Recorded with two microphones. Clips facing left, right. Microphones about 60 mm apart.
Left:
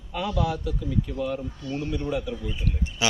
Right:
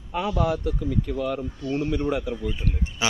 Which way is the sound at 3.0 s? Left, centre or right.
Right.